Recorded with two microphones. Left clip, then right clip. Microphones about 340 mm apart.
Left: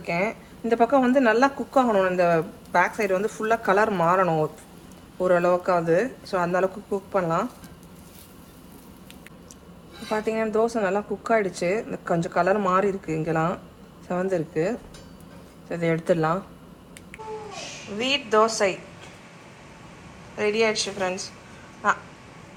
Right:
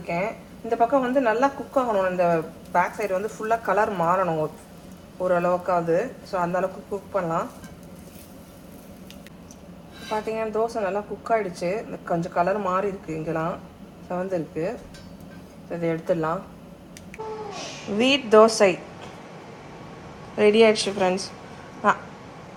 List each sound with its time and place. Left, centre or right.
0.1 s a woman's voice: left
10.1 s a woman's voice: left
17.9 s speech: centre
20.3 s a woman's voice: centre